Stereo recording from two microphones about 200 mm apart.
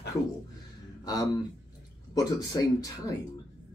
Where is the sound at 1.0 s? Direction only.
20° left (ahead or behind).